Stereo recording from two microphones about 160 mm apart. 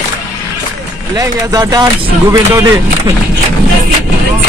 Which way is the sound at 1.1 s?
20° right (ahead or behind).